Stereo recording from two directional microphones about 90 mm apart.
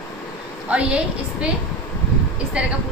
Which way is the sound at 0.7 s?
15° right (ahead or behind).